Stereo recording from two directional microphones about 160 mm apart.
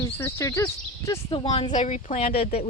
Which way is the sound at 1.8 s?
40° left (ahead or behind).